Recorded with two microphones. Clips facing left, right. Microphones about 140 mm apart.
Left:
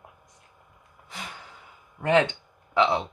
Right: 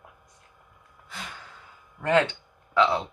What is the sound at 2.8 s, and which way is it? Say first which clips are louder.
Speech: even; 20° left (ahead or behind).